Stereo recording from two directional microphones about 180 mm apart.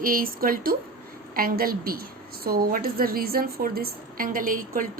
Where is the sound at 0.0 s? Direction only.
50° right (ahead or behind).